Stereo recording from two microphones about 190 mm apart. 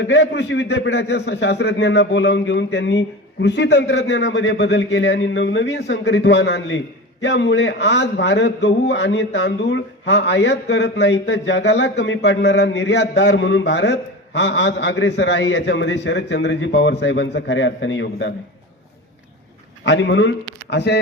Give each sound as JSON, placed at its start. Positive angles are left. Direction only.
{"t": 0.0, "sound": "a man's voice", "side_deg": 75}
{"t": 19.8, "sound": "speech", "side_deg": 70}